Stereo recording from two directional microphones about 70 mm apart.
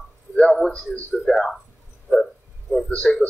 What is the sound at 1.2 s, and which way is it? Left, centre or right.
Speech, centre.